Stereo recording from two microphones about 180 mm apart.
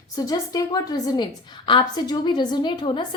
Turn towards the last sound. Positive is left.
turn(degrees=25)  # may be behind; listen again after turning